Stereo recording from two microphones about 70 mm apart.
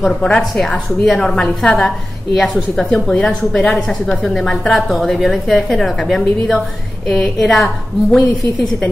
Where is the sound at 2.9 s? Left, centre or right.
Centre.